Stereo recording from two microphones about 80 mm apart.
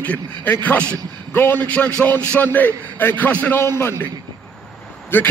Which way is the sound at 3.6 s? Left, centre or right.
Left.